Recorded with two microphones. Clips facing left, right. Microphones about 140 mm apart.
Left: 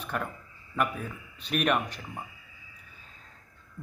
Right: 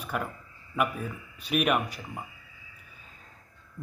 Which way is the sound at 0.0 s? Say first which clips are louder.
Right 1 dB; 5° right (ahead or behind).